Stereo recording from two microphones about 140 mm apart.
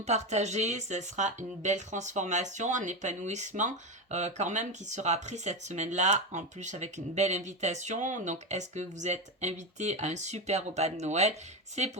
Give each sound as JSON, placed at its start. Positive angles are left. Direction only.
{"t": 0.0, "sound": "speech", "side_deg": -55}